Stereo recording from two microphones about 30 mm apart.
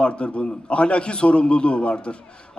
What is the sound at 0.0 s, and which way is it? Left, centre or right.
A man's voice, left.